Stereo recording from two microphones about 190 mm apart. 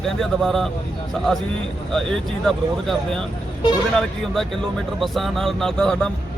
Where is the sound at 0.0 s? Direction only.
Centre (ahead or behind).